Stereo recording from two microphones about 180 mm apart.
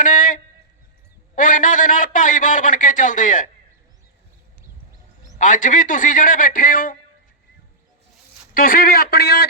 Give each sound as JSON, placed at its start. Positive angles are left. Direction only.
{"t": 0.0, "sound": "a sound", "side_deg": 45}
{"t": 1.4, "sound": "a man's voice", "side_deg": 45}
{"t": 5.4, "sound": "a man's voice", "side_deg": 45}
{"t": 8.5, "sound": "a man's voice", "side_deg": 55}